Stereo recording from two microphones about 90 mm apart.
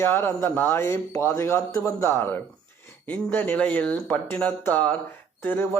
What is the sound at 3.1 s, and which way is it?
A man's voice, 20° left (ahead or behind).